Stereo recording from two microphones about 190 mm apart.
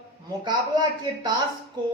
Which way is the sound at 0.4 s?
20° right (ahead or behind).